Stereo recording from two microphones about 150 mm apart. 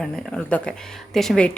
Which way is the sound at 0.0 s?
5° left (ahead or behind).